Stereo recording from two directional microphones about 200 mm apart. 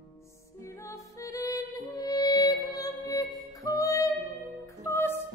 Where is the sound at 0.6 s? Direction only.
15° left (ahead or behind).